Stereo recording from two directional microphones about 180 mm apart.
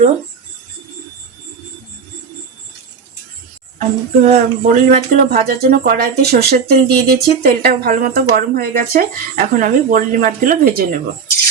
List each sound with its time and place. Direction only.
3.8 s speech: 45° right (ahead or behind)